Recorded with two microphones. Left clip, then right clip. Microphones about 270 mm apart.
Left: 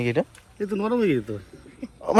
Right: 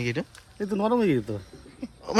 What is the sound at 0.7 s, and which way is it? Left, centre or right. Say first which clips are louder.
Speech: even; centre.